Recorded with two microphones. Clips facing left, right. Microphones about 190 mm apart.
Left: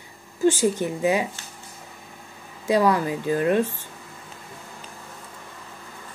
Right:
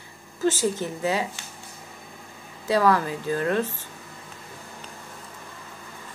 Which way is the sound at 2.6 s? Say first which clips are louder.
Left 1 dB; 15° left (ahead or behind).